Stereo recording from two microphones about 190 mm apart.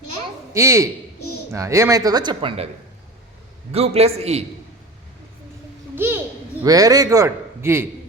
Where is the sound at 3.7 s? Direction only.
30° right (ahead or behind).